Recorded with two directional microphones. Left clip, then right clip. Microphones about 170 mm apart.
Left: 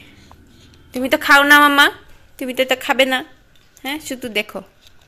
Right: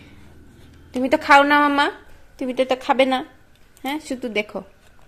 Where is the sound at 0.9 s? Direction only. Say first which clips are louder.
Left 1 dB; 5° right (ahead or behind).